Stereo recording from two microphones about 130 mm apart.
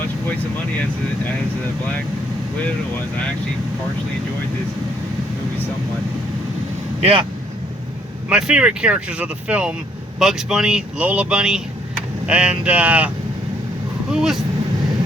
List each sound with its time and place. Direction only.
7.0 s speech: 45° right (ahead or behind)
8.3 s speech: 5° right (ahead or behind)
14.1 s speech: 5° right (ahead or behind)